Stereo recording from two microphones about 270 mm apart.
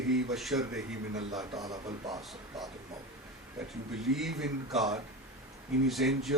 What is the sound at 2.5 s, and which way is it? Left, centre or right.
Speech, centre.